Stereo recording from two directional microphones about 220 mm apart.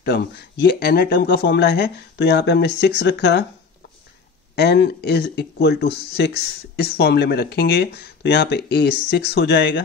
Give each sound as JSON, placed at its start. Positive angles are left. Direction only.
{"t": 0.0, "sound": "speech", "side_deg": 45}
{"t": 4.6, "sound": "speech", "side_deg": 50}